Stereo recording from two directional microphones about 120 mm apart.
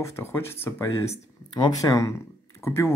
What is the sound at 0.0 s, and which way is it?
Speech, 20° left (ahead or behind).